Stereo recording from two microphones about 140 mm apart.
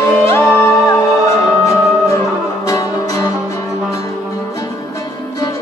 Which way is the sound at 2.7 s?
25° left (ahead or behind).